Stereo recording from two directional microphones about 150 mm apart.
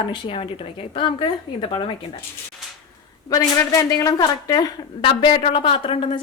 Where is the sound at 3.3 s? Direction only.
25° left (ahead or behind).